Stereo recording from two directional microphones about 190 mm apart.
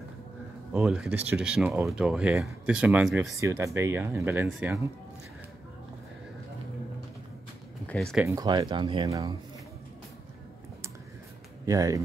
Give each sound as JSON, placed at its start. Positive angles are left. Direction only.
{"t": 0.7, "sound": "speech", "side_deg": -5}
{"t": 3.3, "sound": "speech", "side_deg": -15}
{"t": 7.9, "sound": "speech", "side_deg": 0}
{"t": 8.3, "sound": "speech", "side_deg": -20}
{"t": 11.6, "sound": "speech", "side_deg": -15}